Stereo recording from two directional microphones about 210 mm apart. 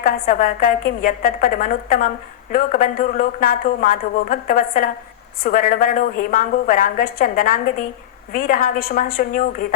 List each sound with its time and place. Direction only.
0.0 s a woman's voice: 40° left (ahead or behind)